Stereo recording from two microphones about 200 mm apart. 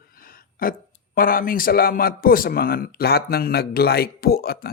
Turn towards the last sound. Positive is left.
turn(degrees=50)  # may be behind; listen again after turning